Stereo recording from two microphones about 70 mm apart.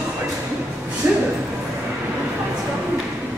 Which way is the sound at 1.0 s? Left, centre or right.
Right.